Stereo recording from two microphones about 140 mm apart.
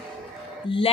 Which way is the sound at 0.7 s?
35° left (ahead or behind).